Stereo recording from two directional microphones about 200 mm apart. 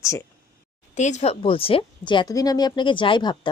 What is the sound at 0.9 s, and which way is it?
Speech, 35° left (ahead or behind).